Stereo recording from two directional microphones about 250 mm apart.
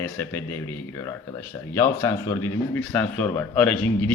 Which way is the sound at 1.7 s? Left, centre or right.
Centre.